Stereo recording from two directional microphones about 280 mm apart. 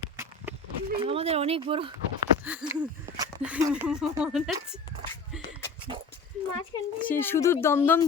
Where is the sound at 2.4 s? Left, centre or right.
Centre.